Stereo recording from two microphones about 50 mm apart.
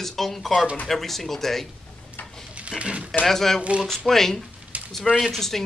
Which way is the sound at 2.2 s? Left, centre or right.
Left.